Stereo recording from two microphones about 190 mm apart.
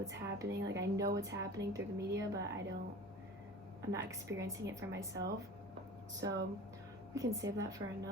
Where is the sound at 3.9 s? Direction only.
15° right (ahead or behind).